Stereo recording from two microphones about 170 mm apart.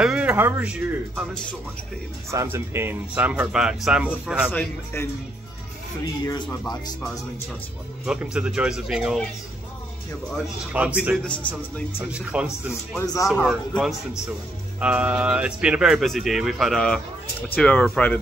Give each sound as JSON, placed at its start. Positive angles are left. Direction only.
{"t": 0.0, "sound": "speech", "side_deg": -5}
{"t": 2.3, "sound": "speech", "side_deg": -15}
{"t": 4.5, "sound": "speech", "side_deg": 10}
{"t": 6.2, "sound": "speech", "side_deg": 25}
{"t": 8.0, "sound": "speech", "side_deg": -5}
{"t": 10.3, "sound": "speech", "side_deg": -10}
{"t": 11.2, "sound": "speech", "side_deg": 10}
{"t": 12.0, "sound": "speech", "side_deg": -5}
{"t": 13.0, "sound": "speech", "side_deg": 20}
{"t": 13.4, "sound": "speech", "side_deg": 0}